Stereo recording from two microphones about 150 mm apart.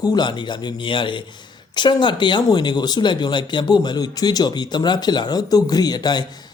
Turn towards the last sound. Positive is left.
turn(degrees=30)  # may be behind; listen again after turning